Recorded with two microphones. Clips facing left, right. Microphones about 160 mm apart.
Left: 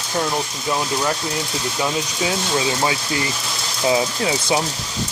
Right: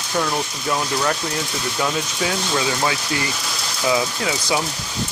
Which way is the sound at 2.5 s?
25° left (ahead or behind).